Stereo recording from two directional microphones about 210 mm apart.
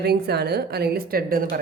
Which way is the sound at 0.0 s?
50° right (ahead or behind).